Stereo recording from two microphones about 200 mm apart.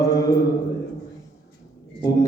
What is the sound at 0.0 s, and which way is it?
Mantra, 15° left (ahead or behind).